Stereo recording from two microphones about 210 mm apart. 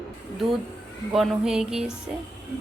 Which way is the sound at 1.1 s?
Centre (ahead or behind).